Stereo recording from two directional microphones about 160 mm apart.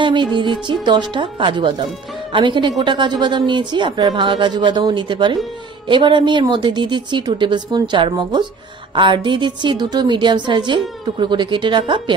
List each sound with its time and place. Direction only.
0.0 s speech: 30° right (ahead or behind)